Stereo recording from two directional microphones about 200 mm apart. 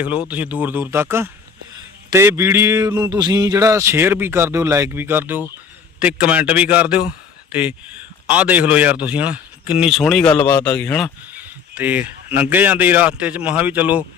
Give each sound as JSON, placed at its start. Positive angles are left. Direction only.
{"t": 0.0, "sound": "speech", "side_deg": -5}
{"t": 8.3, "sound": "a man's voice", "side_deg": -5}
{"t": 11.3, "sound": "speech", "side_deg": -10}